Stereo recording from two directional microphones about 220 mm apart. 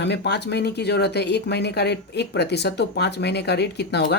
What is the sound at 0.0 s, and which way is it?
Speech, 50° left (ahead or behind).